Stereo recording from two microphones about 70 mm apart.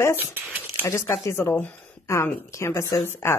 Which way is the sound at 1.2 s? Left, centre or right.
Left.